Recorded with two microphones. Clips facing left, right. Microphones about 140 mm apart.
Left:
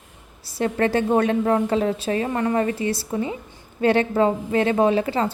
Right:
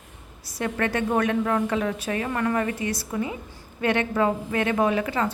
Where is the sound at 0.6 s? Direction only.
30° left (ahead or behind).